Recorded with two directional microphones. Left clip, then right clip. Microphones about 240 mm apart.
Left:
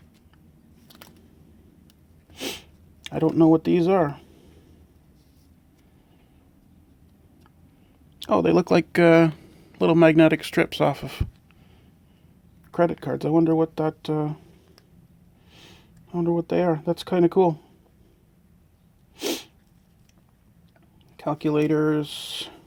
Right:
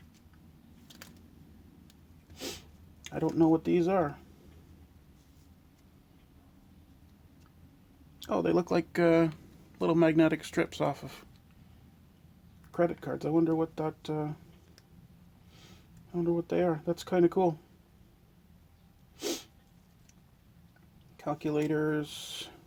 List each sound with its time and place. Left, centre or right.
2.3 s sniff: left
8.2 s speech: left
12.7 s speech: left
15.5 s speech: left
19.1 s sneeze: left
21.2 s speech: left